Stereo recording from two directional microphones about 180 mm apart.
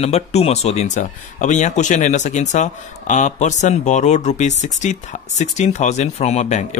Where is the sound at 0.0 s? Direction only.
35° left (ahead or behind).